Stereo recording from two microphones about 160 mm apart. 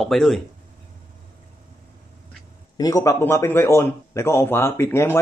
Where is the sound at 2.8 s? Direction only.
20° left (ahead or behind).